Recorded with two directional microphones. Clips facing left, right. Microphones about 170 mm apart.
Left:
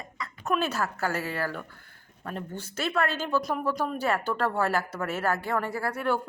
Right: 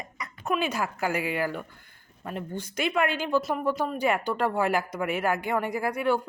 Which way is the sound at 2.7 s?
15° right (ahead or behind).